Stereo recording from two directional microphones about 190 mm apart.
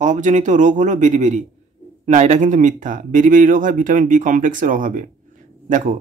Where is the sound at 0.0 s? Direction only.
40° right (ahead or behind).